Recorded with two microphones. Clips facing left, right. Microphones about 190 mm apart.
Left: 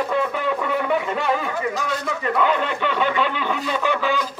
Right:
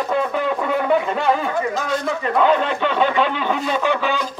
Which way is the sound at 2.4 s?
25° right (ahead or behind).